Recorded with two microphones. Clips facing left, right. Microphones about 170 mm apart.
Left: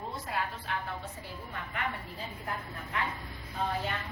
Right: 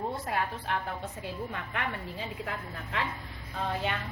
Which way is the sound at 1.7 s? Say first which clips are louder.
Right 2 dB; 90° right.